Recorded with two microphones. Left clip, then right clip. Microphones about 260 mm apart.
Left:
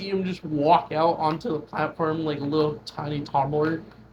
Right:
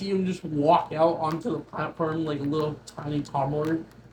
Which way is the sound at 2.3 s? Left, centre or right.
Left.